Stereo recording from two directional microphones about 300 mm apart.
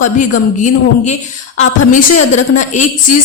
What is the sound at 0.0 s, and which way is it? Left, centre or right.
Speech, left.